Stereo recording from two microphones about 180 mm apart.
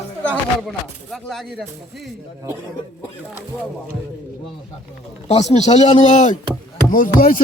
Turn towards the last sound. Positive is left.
turn(degrees=50)  # may be behind; listen again after turning